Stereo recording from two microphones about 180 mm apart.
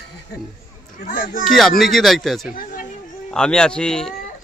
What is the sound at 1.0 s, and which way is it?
Speech, 50° left (ahead or behind).